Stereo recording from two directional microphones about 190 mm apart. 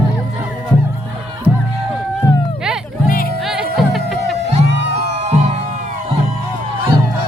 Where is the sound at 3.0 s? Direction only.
50° left (ahead or behind).